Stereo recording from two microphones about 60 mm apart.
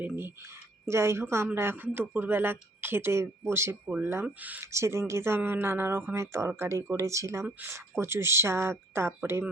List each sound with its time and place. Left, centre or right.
0.9 s speech: right
4.4 s speech: right
4.6 s speech: right
5.4 s speech: right
6.1 s speech: right